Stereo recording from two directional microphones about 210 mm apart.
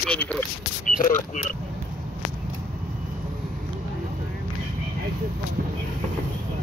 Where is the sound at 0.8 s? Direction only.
40° left (ahead or behind).